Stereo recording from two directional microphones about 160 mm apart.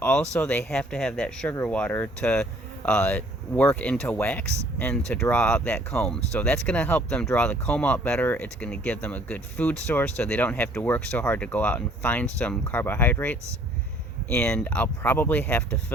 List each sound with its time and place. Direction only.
0.0 s speech: 10° left (ahead or behind)